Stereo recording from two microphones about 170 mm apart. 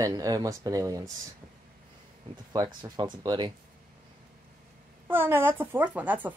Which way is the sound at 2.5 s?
25° right (ahead or behind).